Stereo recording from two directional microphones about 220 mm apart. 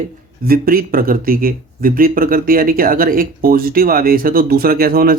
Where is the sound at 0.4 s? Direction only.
40° right (ahead or behind).